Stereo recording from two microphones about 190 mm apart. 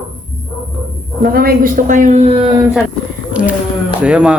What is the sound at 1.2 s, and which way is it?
A woman's voice, 50° right (ahead or behind).